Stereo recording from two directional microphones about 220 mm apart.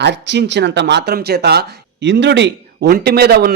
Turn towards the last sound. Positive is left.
turn(degrees=-45)  # may be behind; listen again after turning